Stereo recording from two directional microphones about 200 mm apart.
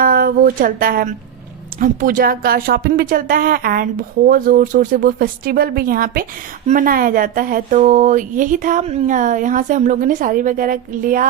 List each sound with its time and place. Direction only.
0.0 s a woman's voice: 45° right (ahead or behind)